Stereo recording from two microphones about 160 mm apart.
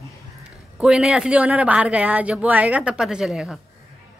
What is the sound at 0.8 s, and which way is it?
Speech, 5° right (ahead or behind).